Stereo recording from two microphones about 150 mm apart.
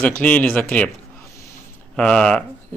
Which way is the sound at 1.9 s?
5° left (ahead or behind).